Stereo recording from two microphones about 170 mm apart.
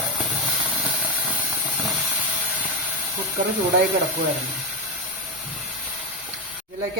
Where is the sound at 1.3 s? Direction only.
5° right (ahead or behind).